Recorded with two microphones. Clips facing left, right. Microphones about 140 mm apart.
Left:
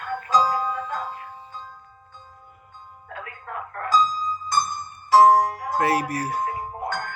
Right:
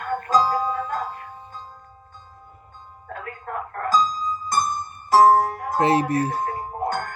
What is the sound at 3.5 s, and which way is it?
Music, 45° right (ahead or behind).